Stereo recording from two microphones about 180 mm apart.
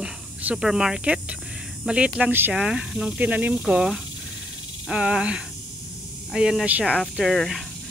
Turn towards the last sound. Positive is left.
turn(degrees=0)  # may be behind; listen again after turning